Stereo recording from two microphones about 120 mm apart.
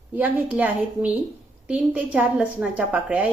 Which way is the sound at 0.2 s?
15° right (ahead or behind).